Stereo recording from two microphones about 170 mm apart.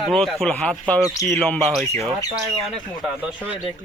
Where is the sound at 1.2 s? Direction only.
20° left (ahead or behind).